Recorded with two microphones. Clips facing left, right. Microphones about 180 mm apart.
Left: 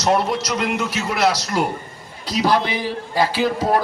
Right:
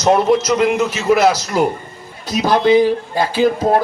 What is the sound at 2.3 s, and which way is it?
Speech, 45° right (ahead or behind).